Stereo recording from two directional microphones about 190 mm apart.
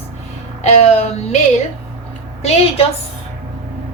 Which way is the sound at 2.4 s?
35° left (ahead or behind).